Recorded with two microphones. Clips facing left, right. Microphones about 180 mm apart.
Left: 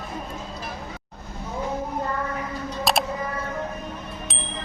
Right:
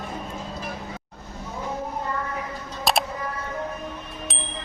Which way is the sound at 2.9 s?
Centre (ahead or behind).